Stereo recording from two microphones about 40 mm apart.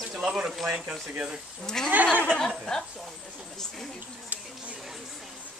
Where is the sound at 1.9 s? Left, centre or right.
Right.